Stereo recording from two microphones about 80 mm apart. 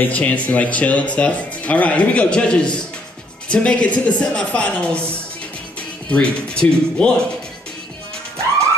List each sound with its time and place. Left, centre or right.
0.0 s speech: centre